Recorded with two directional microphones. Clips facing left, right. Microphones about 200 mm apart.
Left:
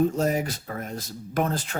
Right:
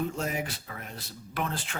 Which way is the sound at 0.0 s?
40° left (ahead or behind).